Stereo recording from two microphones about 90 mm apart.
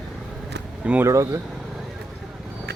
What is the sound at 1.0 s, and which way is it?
Speech, 35° right (ahead or behind).